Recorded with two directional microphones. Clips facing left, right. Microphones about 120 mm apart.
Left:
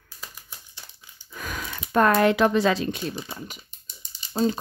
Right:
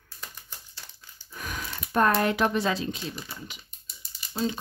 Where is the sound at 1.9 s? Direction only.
90° left.